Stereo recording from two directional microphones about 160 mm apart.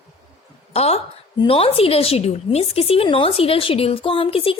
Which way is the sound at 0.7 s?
40° left (ahead or behind).